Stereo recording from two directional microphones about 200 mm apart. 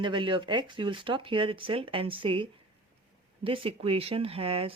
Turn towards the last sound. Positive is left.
turn(degrees=-30)  # may be behind; listen again after turning